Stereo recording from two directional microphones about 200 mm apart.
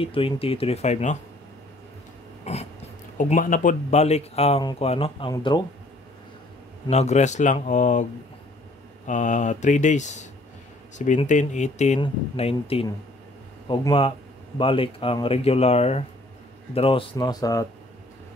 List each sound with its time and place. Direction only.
0.0 s speech: 30° left (ahead or behind)
2.5 s speech: 30° left (ahead or behind)
6.9 s speech: 35° left (ahead or behind); by 17.6 s 20° left (ahead or behind)